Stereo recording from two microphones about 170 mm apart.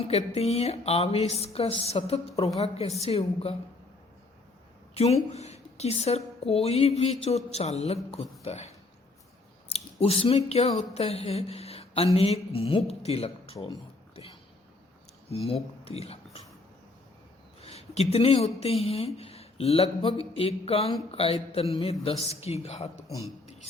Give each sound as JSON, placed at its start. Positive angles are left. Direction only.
{"t": 0.0, "sound": "speech", "side_deg": 35}
{"t": 4.9, "sound": "a woman's voice", "side_deg": 40}
{"t": 15.3, "sound": "speech", "side_deg": 35}
{"t": 17.6, "sound": "speech", "side_deg": 40}